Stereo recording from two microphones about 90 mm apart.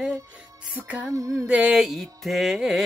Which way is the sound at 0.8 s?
20° right (ahead or behind).